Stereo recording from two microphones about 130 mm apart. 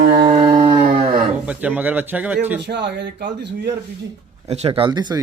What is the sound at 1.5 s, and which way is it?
Speech, 10° right (ahead or behind).